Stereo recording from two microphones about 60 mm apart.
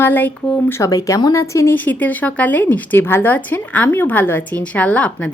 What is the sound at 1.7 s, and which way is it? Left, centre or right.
Speech, left.